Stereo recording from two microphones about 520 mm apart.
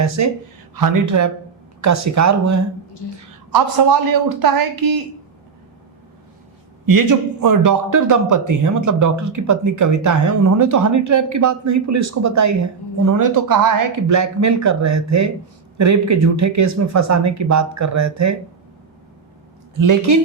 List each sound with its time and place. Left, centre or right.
0.2 s a man's voice: right
6.8 s a man's voice: right
19.8 s a man's voice: right